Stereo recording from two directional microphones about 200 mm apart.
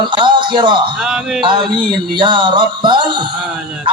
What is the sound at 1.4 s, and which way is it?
Speech, 25° right (ahead or behind).